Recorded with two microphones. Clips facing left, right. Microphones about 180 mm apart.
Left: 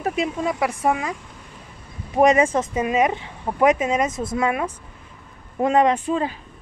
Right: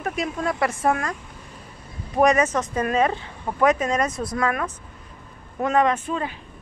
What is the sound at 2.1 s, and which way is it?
Speech, 25° left (ahead or behind).